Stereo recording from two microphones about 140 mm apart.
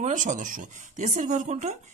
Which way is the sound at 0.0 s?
60° right (ahead or behind).